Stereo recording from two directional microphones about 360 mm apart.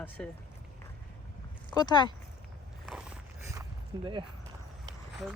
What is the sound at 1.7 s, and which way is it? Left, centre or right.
Speech, centre.